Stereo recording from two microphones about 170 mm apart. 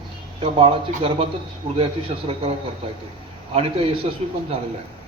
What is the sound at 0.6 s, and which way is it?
A man's voice, 30° right (ahead or behind).